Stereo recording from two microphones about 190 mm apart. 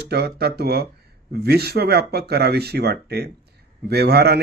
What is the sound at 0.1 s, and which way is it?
Speech, 55° right (ahead or behind).